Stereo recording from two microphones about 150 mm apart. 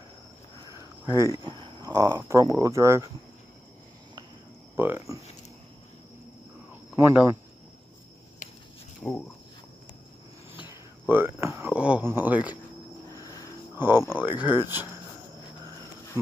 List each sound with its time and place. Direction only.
1.0 s speech: 20° right (ahead or behind)
4.7 s speech: 15° right (ahead or behind)
7.0 s speech: 15° right (ahead or behind)
9.0 s speech: 5° left (ahead or behind)
11.1 s speech: 15° right (ahead or behind)
13.1 s a sound: 25° left (ahead or behind)
13.7 s speech: 15° right (ahead or behind)